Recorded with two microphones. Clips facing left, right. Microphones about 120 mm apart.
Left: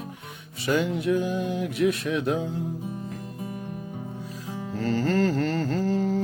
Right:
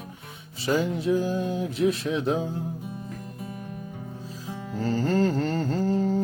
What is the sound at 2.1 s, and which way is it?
Speech, 25° right (ahead or behind).